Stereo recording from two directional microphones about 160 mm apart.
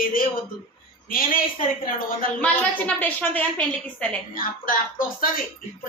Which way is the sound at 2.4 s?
10° left (ahead or behind).